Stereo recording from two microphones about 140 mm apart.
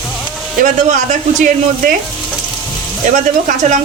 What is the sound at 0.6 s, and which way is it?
Speech, 75° right (ahead or behind).